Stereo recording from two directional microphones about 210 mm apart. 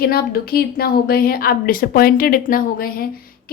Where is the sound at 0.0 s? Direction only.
45° left (ahead or behind).